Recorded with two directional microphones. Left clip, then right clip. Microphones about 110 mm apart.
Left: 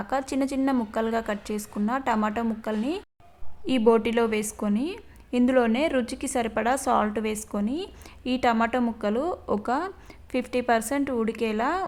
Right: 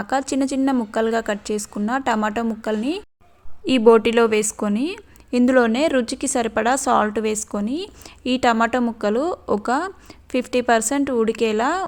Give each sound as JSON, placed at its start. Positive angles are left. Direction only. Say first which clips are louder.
{"t": 0.0, "sound": "a woman's voice", "louder": "right 5 dB", "side_deg": -35}